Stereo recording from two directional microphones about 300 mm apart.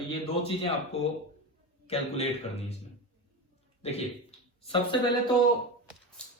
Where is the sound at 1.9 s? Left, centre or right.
Left.